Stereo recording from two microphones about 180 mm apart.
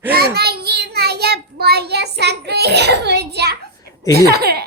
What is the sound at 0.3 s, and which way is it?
Child singing, 60° right (ahead or behind).